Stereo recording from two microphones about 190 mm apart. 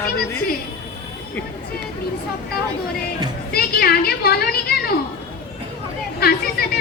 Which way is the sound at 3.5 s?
55° left (ahead or behind).